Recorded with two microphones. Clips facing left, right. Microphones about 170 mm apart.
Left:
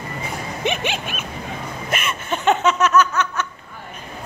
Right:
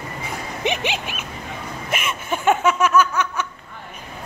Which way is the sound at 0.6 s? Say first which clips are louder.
Even; 15° right (ahead or behind).